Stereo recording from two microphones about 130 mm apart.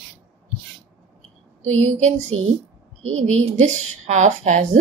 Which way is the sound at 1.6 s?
60° right (ahead or behind).